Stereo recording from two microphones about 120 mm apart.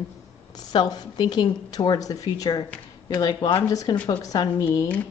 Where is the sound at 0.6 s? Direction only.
35° left (ahead or behind).